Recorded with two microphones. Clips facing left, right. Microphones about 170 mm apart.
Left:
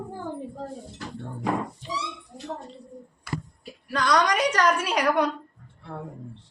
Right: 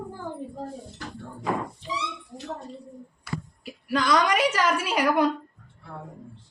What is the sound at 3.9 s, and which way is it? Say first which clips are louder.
A woman's voice: even; 5° right (ahead or behind).